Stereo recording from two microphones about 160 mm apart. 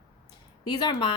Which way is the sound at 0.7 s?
25° left (ahead or behind).